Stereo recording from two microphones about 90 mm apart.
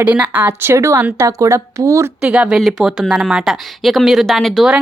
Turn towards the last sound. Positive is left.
turn(degrees=0)  # may be behind; listen again after turning